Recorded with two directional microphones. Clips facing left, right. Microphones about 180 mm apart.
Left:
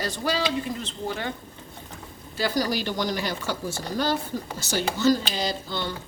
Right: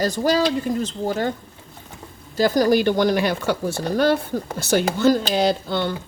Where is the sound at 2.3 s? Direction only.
45° right (ahead or behind).